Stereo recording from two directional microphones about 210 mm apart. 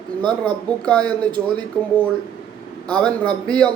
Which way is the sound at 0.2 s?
20° right (ahead or behind).